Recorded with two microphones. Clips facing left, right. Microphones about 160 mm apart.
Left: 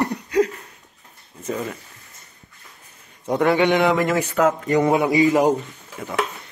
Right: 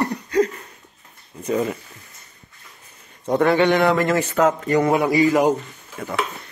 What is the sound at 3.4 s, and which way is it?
Speech, 15° left (ahead or behind).